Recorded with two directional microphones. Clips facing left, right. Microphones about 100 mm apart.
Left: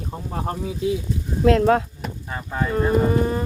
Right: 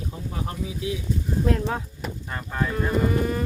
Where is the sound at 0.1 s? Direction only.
45° left (ahead or behind).